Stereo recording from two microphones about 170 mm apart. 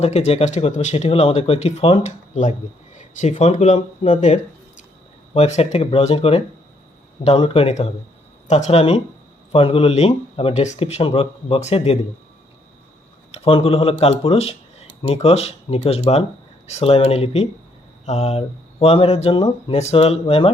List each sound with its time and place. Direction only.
0.0 s speech: 40° left (ahead or behind)
13.3 s speech: 35° left (ahead or behind)